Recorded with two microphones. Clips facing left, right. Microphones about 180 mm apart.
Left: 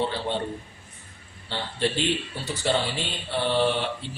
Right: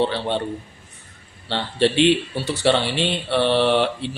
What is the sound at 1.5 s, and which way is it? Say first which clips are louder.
Speech: right 7 dB; 75° right (ahead or behind).